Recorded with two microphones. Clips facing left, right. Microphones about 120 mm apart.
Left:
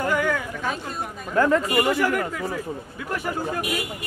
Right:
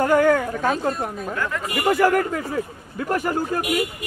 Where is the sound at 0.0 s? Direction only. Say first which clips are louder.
Right 7 dB; 45° right (ahead or behind).